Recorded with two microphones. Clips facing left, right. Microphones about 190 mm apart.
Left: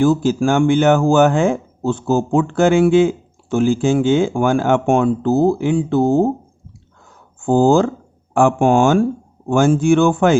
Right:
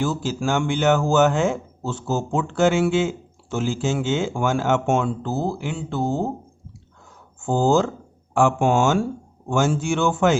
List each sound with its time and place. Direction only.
0.0 s speech: 55° left (ahead or behind)
7.4 s speech: 55° left (ahead or behind)